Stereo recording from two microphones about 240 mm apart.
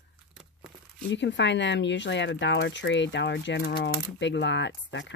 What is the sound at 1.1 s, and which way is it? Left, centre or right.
Speech, left.